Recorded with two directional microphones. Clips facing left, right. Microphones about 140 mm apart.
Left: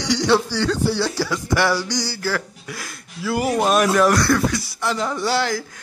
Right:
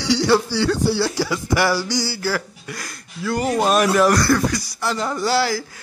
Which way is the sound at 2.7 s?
Centre (ahead or behind).